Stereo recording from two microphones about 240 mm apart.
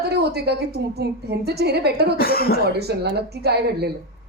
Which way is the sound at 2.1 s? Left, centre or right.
Left.